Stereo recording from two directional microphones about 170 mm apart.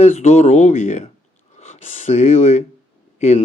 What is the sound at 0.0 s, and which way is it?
Speech, 40° left (ahead or behind).